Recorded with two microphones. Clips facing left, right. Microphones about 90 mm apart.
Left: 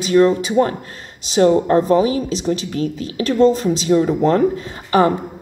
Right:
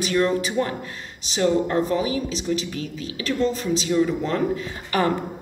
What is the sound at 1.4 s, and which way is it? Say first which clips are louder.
A woman's voice: left 7 dB; 40° left (ahead or behind).